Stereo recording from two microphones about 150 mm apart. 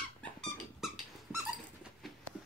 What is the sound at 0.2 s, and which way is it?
Squeak, centre (ahead or behind).